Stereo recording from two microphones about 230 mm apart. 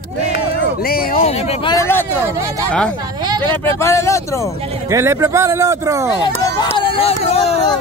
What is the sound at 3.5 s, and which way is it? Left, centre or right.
Speech, centre.